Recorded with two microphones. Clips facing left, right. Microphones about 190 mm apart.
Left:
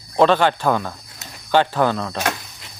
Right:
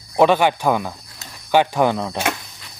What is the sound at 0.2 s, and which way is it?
Speech, 10° right (ahead or behind).